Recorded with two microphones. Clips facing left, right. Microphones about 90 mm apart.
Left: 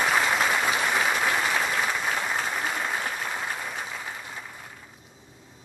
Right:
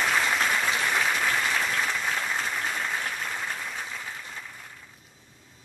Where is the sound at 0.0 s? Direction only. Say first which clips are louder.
Left 2 dB; 15° left (ahead or behind).